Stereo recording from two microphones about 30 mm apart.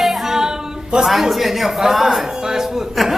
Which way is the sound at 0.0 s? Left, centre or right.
Centre.